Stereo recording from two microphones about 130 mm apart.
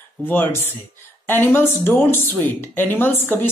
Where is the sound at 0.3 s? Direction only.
15° left (ahead or behind).